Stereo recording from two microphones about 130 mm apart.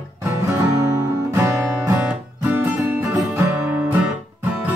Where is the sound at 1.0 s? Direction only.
15° right (ahead or behind).